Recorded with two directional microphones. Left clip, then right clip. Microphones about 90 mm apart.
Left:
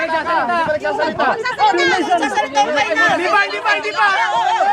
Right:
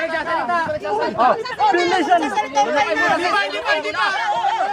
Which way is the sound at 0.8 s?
35° left (ahead or behind).